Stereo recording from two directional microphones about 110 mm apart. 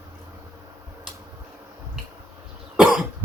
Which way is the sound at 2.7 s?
5° right (ahead or behind).